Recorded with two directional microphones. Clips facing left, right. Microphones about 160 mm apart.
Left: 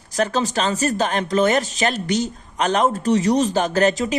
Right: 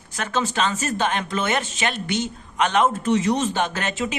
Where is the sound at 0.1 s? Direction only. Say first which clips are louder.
Left 4 dB; 35° left (ahead or behind).